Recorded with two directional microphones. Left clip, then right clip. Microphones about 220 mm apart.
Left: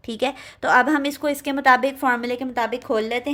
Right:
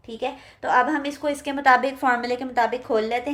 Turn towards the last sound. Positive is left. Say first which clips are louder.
# even
turn(degrees=40)  # may be behind; listen again after turning